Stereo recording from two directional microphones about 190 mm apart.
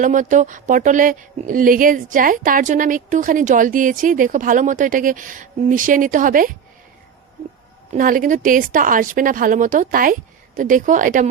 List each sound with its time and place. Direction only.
0.0 s speech: 40° right (ahead or behind)
7.9 s speech: 45° right (ahead or behind)